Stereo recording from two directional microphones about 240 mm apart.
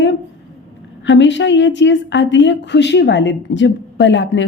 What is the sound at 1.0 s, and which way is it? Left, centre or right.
A woman's voice, left.